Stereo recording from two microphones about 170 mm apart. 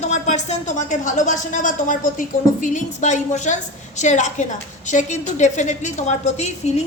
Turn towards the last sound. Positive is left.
turn(degrees=40)  # may be behind; listen again after turning